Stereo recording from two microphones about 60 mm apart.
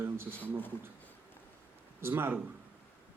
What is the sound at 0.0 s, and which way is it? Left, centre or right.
Speech, right.